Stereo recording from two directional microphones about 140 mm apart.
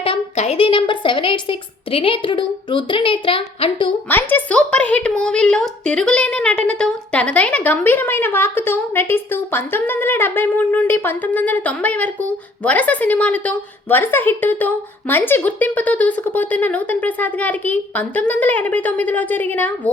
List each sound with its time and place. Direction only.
0.0 s a woman's voice: 45° left (ahead or behind)
4.1 s a woman's voice: 15° left (ahead or behind)